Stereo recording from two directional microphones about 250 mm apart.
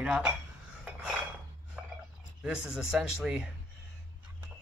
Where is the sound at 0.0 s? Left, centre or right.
Centre.